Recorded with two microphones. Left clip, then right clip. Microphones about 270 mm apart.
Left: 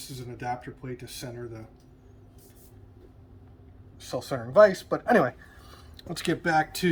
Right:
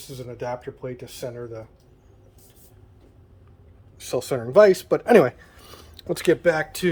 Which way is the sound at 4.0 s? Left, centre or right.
Right.